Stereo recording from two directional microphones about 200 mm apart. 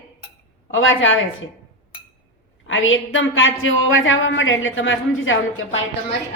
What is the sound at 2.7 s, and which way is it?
A woman's voice, 75° left (ahead or behind).